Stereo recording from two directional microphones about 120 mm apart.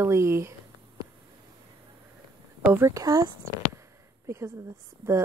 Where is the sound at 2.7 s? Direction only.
25° right (ahead or behind).